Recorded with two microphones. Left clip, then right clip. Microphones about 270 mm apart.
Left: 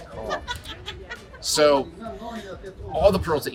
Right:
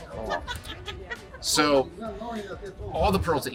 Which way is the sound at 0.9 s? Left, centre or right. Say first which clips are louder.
Right 1 dB; centre.